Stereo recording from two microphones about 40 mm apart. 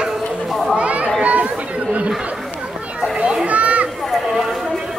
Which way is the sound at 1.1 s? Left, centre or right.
Right.